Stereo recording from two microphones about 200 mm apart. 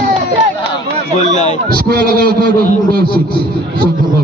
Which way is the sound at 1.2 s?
35° left (ahead or behind).